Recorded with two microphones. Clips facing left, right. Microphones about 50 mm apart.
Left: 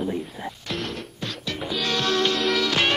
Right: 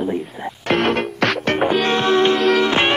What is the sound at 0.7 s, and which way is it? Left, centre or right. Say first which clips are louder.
Music: right 16 dB; right.